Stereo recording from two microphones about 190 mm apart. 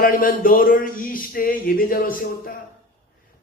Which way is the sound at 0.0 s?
50° left (ahead or behind).